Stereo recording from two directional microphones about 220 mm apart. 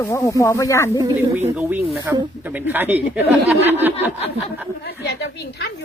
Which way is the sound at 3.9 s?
30° left (ahead or behind).